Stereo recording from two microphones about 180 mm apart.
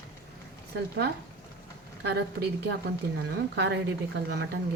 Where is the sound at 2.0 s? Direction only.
65° right (ahead or behind).